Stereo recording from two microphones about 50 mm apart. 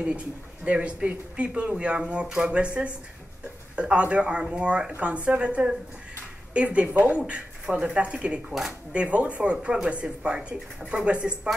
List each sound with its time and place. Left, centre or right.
0.7 s speech: right
2.5 s speech: right